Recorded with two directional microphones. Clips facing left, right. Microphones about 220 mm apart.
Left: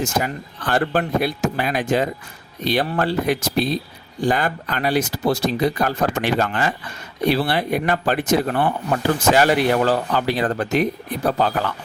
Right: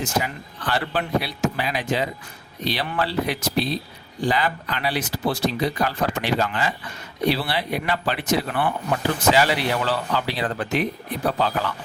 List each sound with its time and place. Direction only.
0.0 s speech: 45° left (ahead or behind)